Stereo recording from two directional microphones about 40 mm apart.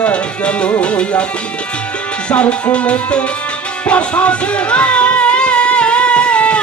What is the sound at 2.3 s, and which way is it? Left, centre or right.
Music, left.